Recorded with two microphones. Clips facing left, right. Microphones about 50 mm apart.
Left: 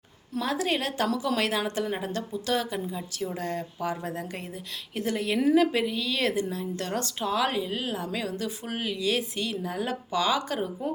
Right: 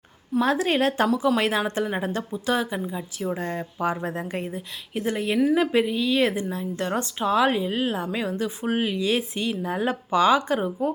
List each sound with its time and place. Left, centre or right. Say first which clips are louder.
0.3 s a woman's voice: right 6 dB; right
1.4 s a woman's voice: right 4 dB; right
2.3 s a woman's voice: right 3 dB; right
3.2 s a woman's voice: right 4 dB; right